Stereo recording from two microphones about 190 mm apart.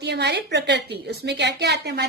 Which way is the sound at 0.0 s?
60° right (ahead or behind).